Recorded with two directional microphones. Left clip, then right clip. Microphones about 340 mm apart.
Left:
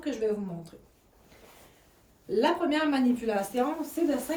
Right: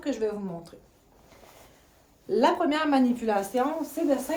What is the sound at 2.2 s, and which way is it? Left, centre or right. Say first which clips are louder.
Speech: right 3 dB; right.